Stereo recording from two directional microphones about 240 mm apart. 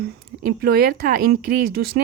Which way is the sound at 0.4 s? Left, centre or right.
Right.